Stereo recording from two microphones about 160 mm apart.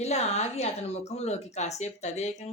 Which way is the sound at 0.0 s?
45° left (ahead or behind).